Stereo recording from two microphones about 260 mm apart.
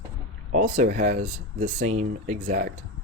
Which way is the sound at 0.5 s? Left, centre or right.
Right.